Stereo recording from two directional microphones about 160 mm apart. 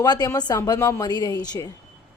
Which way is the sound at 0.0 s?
25° left (ahead or behind).